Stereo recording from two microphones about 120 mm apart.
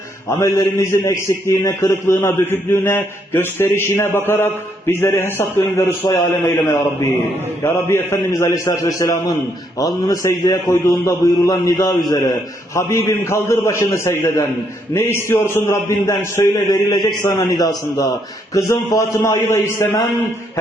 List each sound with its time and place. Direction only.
0.3 s a man's voice: 25° left (ahead or behind)